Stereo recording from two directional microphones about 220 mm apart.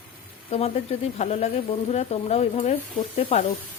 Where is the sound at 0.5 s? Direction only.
30° left (ahead or behind).